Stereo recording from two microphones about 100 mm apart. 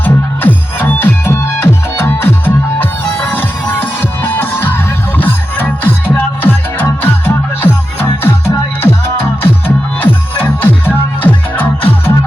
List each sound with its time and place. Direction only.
0.0 s music: 15° left (ahead or behind); by 9.0 s 35° left (ahead or behind)
10.0 s music: 15° left (ahead or behind)